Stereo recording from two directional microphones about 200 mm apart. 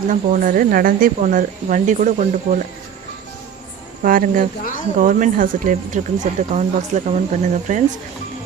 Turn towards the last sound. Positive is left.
turn(degrees=-40)  # may be behind; listen again after turning